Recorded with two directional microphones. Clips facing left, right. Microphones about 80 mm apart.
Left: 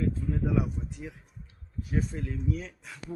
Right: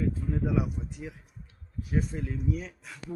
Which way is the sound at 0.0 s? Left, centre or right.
Centre.